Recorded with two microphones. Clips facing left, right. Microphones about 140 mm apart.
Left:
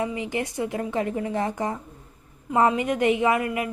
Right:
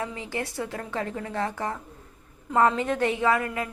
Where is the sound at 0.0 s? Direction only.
15° left (ahead or behind).